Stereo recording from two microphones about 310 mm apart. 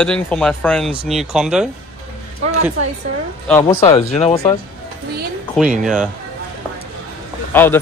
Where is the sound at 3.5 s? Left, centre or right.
Centre.